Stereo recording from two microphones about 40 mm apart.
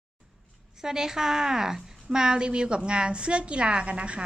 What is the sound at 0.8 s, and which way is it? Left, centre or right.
A woman's voice, centre.